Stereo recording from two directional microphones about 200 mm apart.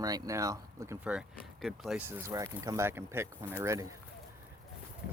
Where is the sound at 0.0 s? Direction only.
15° right (ahead or behind); by 2.0 s centre (ahead or behind).